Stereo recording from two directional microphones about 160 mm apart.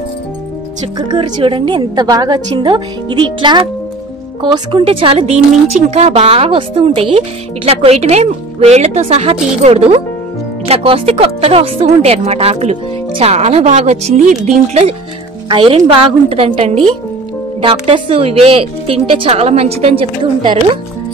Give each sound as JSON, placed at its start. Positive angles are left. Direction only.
{"t": 0.9, "sound": "a woman's voice", "side_deg": -30}